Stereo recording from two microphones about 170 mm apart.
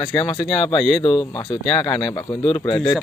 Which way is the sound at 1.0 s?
30° left (ahead or behind).